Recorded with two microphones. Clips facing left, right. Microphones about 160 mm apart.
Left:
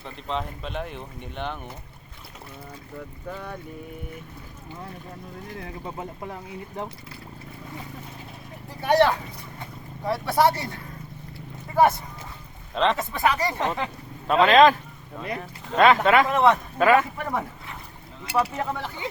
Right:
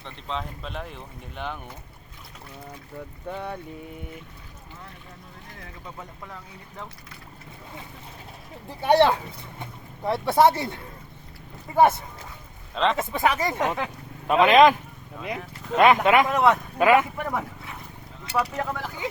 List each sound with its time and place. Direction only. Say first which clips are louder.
0.0 s speech: left 2 dB; centre (ahead or behind)
3.2 s speech: right 3 dB; 20° right (ahead or behind)
5.5 s speech: left 6 dB; 30° left (ahead or behind)
8.8 s speech: right 1 dB; 25° right (ahead or behind)
12.7 s speech: left 1 dB; centre (ahead or behind)
13.0 s speech: even; 20° right (ahead or behind)
13.6 s speech: right 1 dB; 5° right (ahead or behind)
15.2 s speech: even; 5° right (ahead or behind)
16.7 s speech: even; 15° right (ahead or behind)
17.2 s speech: even; 5° right (ahead or behind)